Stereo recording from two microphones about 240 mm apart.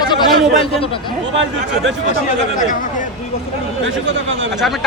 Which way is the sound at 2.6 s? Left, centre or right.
Left.